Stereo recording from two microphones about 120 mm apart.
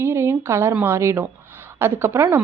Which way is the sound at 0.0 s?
20° right (ahead or behind).